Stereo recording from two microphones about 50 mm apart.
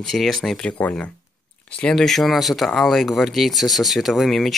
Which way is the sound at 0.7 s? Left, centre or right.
Left.